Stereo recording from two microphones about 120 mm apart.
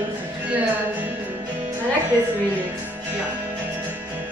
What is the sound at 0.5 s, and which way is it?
Speech, 15° right (ahead or behind).